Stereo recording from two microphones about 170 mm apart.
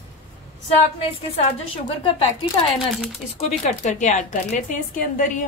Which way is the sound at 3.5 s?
40° left (ahead or behind).